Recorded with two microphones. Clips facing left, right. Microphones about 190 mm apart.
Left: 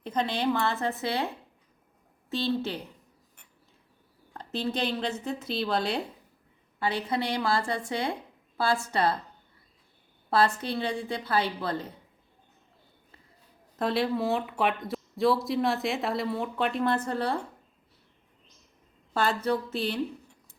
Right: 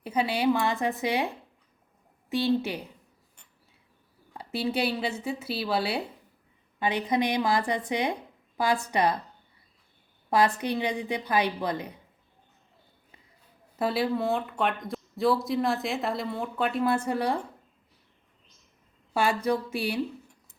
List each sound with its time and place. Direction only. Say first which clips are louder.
0.0 s a woman's voice: right 2 dB; 10° right (ahead or behind)
2.3 s a woman's voice: right 3 dB; 15° right (ahead or behind)
4.4 s a woman's voice: right 2 dB; 10° right (ahead or behind)
6.7 s a woman's voice: right 3 dB; 15° right (ahead or behind)
10.2 s a woman's voice: right 1 dB; 15° right (ahead or behind)
13.7 s speech: even; 5° right (ahead or behind)
19.1 s a woman's voice: right 1 dB; 10° right (ahead or behind)